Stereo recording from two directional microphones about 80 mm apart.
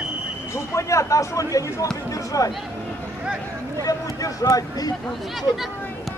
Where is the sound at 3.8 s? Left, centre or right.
Left.